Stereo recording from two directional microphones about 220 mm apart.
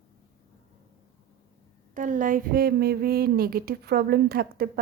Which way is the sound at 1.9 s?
35° right (ahead or behind).